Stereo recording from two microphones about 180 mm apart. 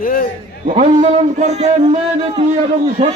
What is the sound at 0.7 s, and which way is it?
A man's voice, 40° right (ahead or behind).